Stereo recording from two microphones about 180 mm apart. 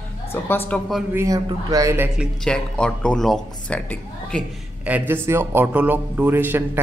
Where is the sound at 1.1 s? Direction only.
15° right (ahead or behind).